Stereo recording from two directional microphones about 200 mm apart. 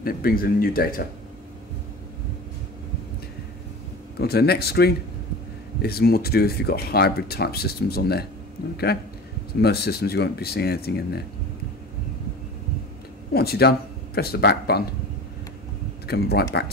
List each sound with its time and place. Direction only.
0.0 s speech: 45° left (ahead or behind)
4.2 s speech: 50° left (ahead or behind)
13.3 s speech: 50° left (ahead or behind)
16.1 s speech: 50° left (ahead or behind)